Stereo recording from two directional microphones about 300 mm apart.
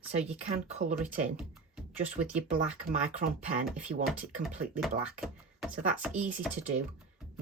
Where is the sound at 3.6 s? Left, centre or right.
Centre.